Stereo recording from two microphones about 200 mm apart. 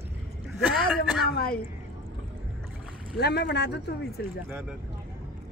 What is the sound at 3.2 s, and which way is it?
Speech, 55° left (ahead or behind).